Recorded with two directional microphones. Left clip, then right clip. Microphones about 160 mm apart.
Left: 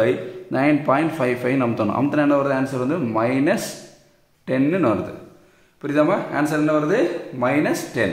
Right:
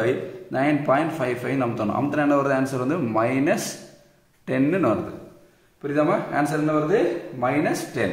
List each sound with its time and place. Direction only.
0.0 s a man's voice: 35° left (ahead or behind)
5.8 s a man's voice: 40° left (ahead or behind)
6.0 s a man's voice: 25° left (ahead or behind)
6.7 s a man's voice: 35° left (ahead or behind)
7.7 s a man's voice: 25° left (ahead or behind)